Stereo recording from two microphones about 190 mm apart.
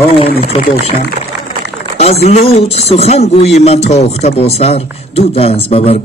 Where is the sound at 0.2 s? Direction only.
30° left (ahead or behind).